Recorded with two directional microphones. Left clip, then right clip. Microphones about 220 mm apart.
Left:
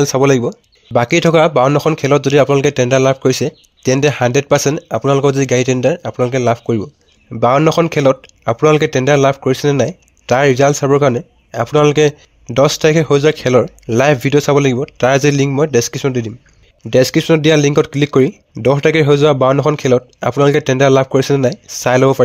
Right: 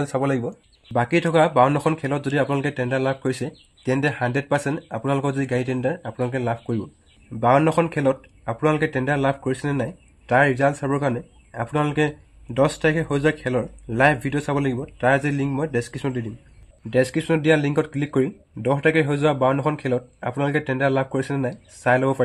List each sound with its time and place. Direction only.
0.0 s speech: 40° left (ahead or behind)